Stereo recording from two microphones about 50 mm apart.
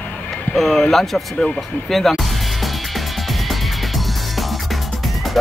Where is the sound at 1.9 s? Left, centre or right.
Centre.